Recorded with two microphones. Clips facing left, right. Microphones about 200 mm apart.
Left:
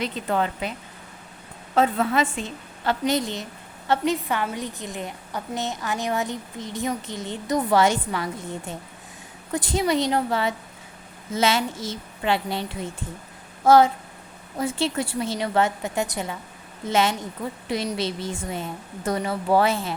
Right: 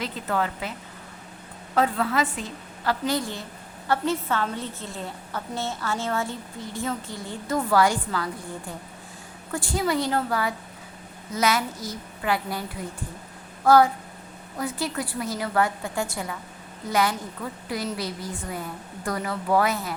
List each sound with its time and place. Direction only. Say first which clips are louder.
0.0 s a woman's voice: left 2 dB; 20° left (ahead or behind)
1.7 s a woman's voice: left 2 dB; 25° left (ahead or behind)